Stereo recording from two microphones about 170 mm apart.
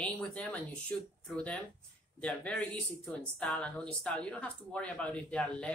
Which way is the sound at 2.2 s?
5° left (ahead or behind).